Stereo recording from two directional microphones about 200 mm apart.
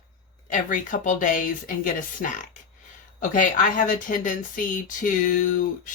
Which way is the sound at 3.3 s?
40° left (ahead or behind).